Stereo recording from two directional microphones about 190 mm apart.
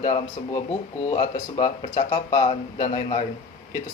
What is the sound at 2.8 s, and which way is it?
Speech, 35° left (ahead or behind).